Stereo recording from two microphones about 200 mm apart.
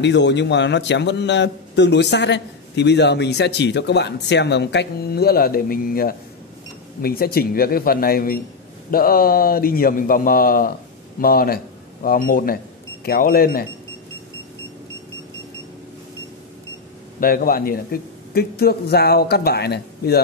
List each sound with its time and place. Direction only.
0.0 s a man's voice: 60° left (ahead or behind)
17.2 s speech: 45° left (ahead or behind)